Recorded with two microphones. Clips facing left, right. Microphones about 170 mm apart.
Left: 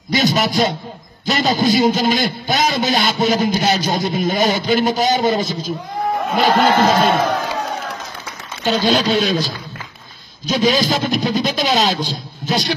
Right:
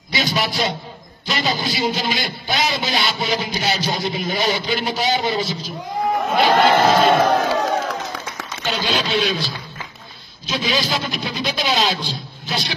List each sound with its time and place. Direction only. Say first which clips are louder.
0.1 s a man's voice: left 6 dB; 45° left (ahead or behind)
8.6 s a man's voice: left 7 dB; 40° left (ahead or behind)